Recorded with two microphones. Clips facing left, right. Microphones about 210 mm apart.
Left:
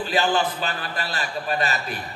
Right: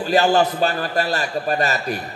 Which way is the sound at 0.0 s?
40° right (ahead or behind).